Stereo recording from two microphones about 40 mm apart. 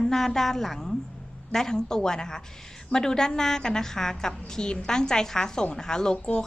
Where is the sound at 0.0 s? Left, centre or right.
Centre.